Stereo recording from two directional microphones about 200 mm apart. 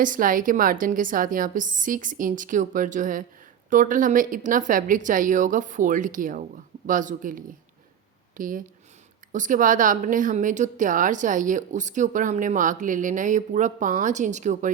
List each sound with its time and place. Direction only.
0.0 s speech: 40° right (ahead or behind)